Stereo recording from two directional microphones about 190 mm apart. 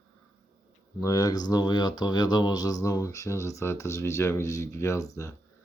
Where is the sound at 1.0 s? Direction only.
20° left (ahead or behind).